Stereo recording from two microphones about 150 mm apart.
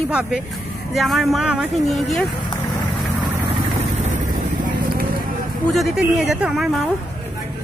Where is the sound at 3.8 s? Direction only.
55° right (ahead or behind).